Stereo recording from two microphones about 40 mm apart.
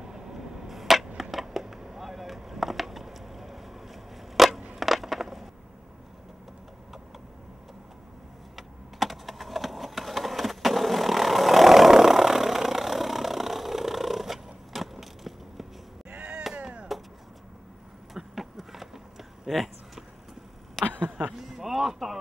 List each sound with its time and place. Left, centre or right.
0.0 s a sound: centre
4.7 s crushing: centre
8.5 s typing: centre
16.1 s chop: right
16.9 s chop: centre
18.1 s vehicle: centre
19.4 s a sound: centre